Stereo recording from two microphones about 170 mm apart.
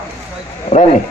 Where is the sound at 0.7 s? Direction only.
45° left (ahead or behind).